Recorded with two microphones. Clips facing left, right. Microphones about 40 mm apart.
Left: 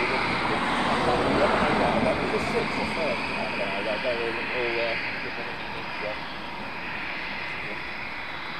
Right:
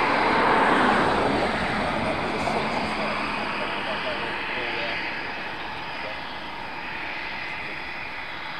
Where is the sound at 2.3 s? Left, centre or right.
Right.